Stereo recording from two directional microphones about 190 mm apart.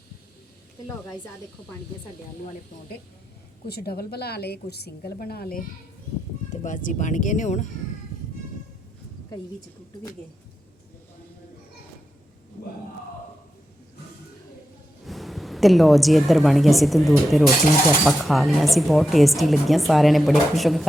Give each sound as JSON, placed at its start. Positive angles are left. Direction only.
{"t": 3.7, "sound": "a woman's voice", "side_deg": 55}
{"t": 6.5, "sound": "speech", "side_deg": 40}
{"t": 15.0, "sound": "a woman's voice", "side_deg": 0}